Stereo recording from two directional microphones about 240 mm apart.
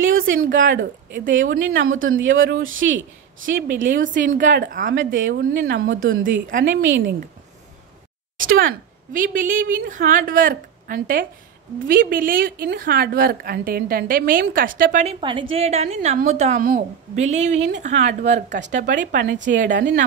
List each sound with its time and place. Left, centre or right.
0.4 s a woman's voice: right
0.7 s speech: right
3.6 s a woman's voice: right
5.1 s a woman's voice: right
6.6 s speech: right
8.5 s a woman's voice: right
19.2 s speech: right